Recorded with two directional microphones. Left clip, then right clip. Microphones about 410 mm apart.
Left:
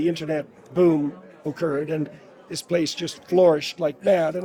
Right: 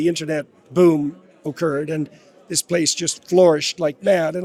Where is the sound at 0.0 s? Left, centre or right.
Right.